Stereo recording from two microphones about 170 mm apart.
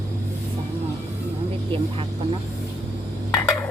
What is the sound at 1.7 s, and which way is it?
Vehicle, 30° right (ahead or behind).